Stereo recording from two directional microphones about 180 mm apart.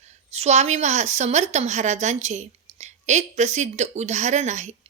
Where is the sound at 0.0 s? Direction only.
40° right (ahead or behind).